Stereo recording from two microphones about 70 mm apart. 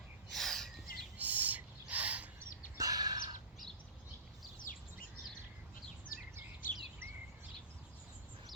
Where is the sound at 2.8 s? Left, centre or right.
Right.